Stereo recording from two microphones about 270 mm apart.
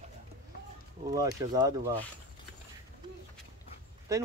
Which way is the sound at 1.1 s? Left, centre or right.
Centre.